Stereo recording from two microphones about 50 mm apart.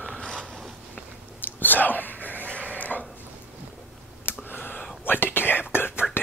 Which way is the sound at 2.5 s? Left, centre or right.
Left.